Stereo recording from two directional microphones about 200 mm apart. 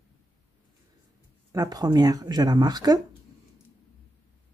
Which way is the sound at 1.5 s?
20° right (ahead or behind).